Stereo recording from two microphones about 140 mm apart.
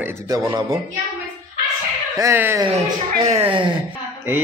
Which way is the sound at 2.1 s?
20° right (ahead or behind).